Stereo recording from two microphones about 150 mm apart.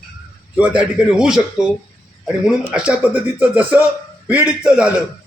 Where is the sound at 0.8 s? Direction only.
5° right (ahead or behind).